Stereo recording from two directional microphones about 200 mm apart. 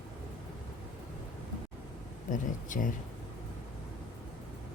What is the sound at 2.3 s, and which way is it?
Speech, 40° left (ahead or behind).